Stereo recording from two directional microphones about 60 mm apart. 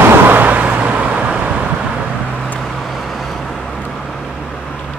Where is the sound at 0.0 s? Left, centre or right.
Right.